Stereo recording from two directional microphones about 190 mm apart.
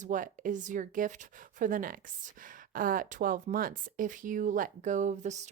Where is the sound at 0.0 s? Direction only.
45° right (ahead or behind).